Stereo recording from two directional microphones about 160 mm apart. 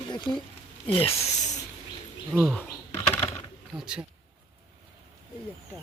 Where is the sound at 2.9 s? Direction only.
15° left (ahead or behind).